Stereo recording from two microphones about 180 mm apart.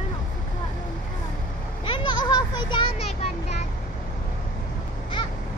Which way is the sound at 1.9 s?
25° left (ahead or behind).